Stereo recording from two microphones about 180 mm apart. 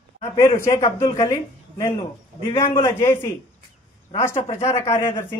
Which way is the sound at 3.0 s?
15° left (ahead or behind).